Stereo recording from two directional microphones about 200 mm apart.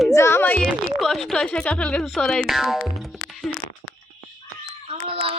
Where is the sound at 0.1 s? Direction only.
15° left (ahead or behind).